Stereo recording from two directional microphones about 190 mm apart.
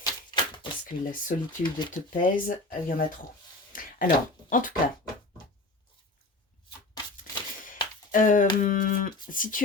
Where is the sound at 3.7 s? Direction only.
45° left (ahead or behind).